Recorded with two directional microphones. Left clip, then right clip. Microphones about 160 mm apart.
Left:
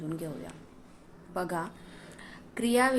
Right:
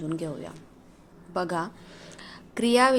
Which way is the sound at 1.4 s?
30° right (ahead or behind).